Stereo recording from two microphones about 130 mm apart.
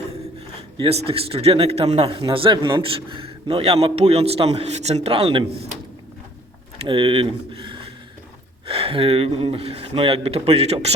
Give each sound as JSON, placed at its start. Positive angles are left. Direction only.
{"t": 0.9, "sound": "a man's voice", "side_deg": -50}
{"t": 6.8, "sound": "a man's voice", "side_deg": -40}